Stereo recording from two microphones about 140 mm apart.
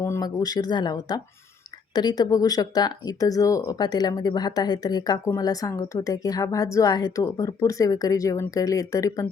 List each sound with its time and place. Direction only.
0.0 s speech: 25° left (ahead or behind)